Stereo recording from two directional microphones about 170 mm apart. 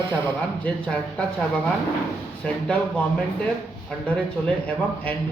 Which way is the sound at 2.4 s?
10° left (ahead or behind).